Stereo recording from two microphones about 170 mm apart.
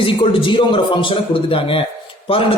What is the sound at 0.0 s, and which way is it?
Speech, 30° left (ahead or behind).